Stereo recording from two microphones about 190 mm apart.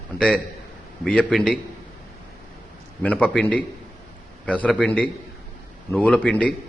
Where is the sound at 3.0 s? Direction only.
5° left (ahead or behind).